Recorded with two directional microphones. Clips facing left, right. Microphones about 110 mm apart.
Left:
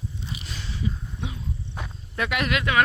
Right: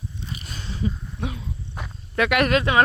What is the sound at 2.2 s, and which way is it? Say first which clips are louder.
Speech: right 6 dB; 65° right (ahead or behind).